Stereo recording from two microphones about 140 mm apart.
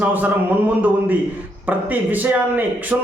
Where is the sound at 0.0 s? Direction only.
10° right (ahead or behind).